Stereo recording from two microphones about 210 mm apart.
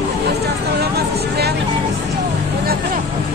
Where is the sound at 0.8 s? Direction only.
50° right (ahead or behind).